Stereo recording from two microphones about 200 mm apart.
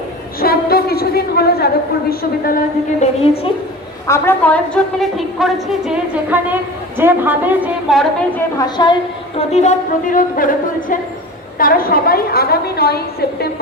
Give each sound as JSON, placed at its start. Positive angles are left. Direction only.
{"t": 0.4, "sound": "a woman's voice", "side_deg": 50}
{"t": 4.0, "sound": "a woman's voice", "side_deg": 10}
{"t": 8.5, "sound": "a woman's voice", "side_deg": 20}
{"t": 9.4, "sound": "music", "side_deg": 35}
{"t": 11.6, "sound": "a woman's voice", "side_deg": 45}